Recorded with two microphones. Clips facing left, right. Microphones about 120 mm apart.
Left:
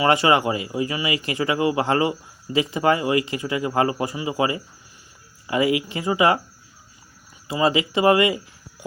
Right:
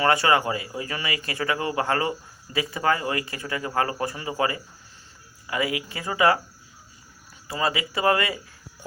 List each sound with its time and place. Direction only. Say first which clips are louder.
0.0 s speech: left 3 dB; 20° left (ahead or behind)
7.4 s speech: left 6 dB; 20° left (ahead or behind)